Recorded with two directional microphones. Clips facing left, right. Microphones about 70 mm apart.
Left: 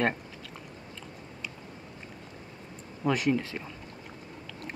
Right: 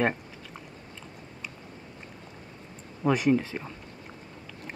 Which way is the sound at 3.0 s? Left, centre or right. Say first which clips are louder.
Right 3 dB; centre.